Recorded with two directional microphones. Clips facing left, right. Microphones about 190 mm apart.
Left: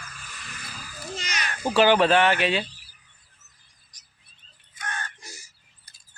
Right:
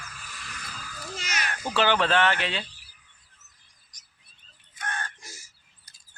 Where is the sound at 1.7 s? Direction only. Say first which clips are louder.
Left 5 dB; 15° left (ahead or behind).